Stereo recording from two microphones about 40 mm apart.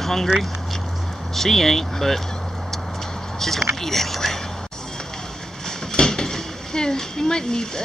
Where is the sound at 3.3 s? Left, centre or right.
Centre.